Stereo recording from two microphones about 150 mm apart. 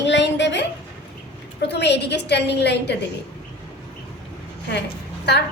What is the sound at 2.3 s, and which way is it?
Speech, 90° left.